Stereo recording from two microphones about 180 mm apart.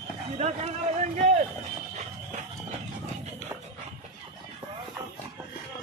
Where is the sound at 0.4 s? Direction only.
40° right (ahead or behind).